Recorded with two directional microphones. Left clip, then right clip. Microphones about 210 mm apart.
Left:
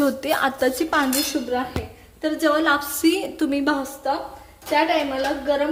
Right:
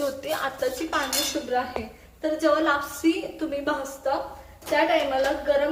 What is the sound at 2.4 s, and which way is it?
A woman's voice, 45° left (ahead or behind).